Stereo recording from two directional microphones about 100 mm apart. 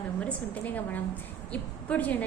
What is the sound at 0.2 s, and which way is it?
A woman's voice, 15° left (ahead or behind).